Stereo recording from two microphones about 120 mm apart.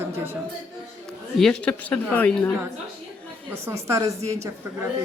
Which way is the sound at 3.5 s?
20° right (ahead or behind).